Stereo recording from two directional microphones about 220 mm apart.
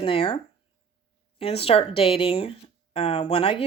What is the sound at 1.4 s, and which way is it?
A woman's voice, 25° left (ahead or behind).